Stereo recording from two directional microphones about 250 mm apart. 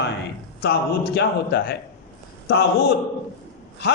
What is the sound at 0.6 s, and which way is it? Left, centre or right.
A man's voice, left.